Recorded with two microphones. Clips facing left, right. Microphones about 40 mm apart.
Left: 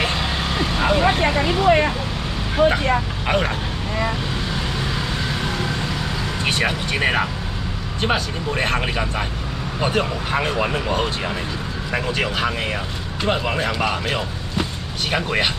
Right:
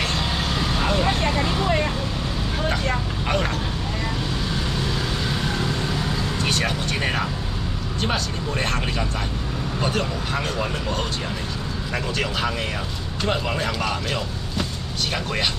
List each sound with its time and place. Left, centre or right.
0.0 s vehicle: centre
2.5 s speech: left
6.4 s speech: left